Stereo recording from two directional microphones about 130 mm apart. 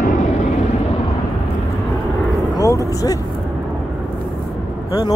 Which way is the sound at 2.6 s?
25° left (ahead or behind).